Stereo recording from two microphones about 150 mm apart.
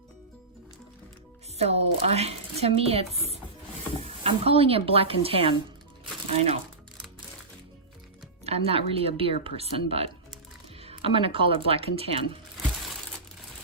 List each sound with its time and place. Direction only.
1.5 s speech: 45° right (ahead or behind)
8.4 s speech: 40° right (ahead or behind)